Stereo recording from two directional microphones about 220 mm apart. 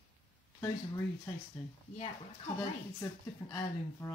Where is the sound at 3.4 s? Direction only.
15° left (ahead or behind).